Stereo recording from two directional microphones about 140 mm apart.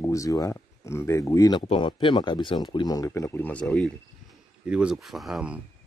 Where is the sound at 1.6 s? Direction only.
40° left (ahead or behind); by 3.9 s 5° left (ahead or behind).